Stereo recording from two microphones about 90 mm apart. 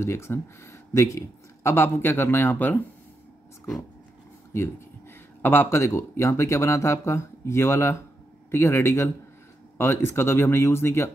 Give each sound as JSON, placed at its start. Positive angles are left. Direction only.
{"t": 0.0, "sound": "speech", "side_deg": 30}
{"t": 5.4, "sound": "speech", "side_deg": 25}